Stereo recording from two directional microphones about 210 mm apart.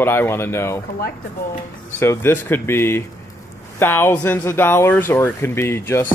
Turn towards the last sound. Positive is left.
turn(degrees=10)  # may be behind; listen again after turning